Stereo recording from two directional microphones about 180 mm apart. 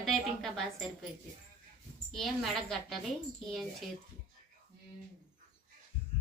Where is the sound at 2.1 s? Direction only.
Centre (ahead or behind).